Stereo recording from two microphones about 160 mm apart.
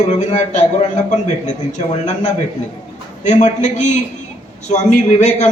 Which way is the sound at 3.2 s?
45° left (ahead or behind).